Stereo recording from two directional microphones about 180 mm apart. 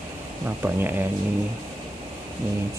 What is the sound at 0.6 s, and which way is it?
Speech, 10° right (ahead or behind).